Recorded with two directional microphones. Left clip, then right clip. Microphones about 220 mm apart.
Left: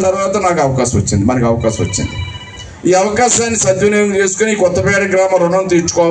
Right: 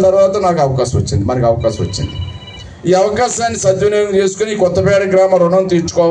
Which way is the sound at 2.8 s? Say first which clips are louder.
Left 1 dB; 70° right (ahead or behind).